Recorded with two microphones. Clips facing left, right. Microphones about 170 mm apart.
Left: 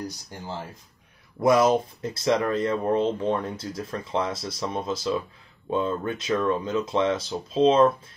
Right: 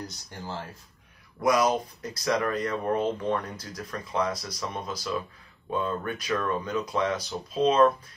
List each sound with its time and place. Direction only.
1.4 s speech: 25° left (ahead or behind)